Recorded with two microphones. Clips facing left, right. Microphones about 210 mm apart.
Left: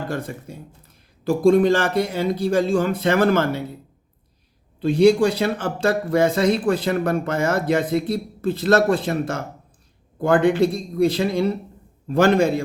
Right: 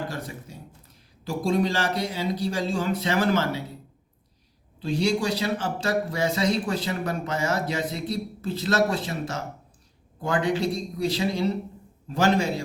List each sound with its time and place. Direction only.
0.1 s a man's voice: 55° left (ahead or behind)
4.8 s speech: 55° left (ahead or behind)